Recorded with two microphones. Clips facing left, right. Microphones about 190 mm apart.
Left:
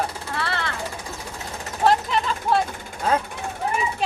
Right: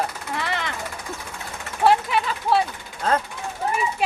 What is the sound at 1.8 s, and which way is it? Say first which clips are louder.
Speech: right 1 dB; 10° right (ahead or behind).